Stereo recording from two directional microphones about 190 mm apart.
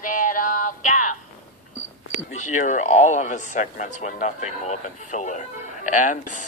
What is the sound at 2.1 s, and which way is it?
Speech, 40° left (ahead or behind).